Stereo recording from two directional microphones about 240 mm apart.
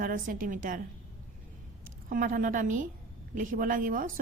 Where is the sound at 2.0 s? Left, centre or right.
Right.